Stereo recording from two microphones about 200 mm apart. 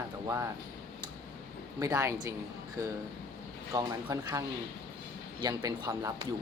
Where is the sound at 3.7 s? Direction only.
15° right (ahead or behind).